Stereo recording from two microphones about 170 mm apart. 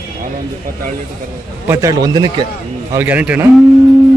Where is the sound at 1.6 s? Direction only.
15° right (ahead or behind).